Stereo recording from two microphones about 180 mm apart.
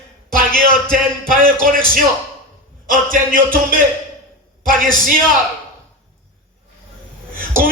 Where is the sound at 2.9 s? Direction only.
50° right (ahead or behind).